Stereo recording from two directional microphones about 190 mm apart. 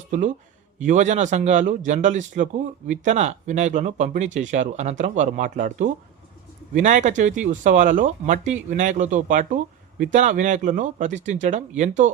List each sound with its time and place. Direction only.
0.8 s speech: 40° right (ahead or behind)